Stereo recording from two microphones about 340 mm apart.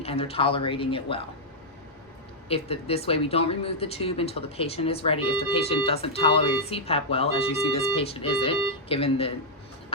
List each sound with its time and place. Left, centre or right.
0.0 s speech: centre
2.5 s speech: centre